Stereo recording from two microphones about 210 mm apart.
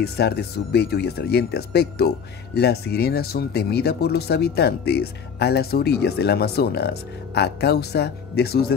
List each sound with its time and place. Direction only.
0.0 s speech: 50° left (ahead or behind)